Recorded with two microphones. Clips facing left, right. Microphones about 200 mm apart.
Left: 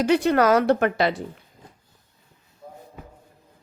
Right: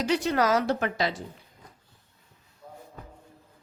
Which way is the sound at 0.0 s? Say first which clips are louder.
Left 6 dB; 55° left (ahead or behind).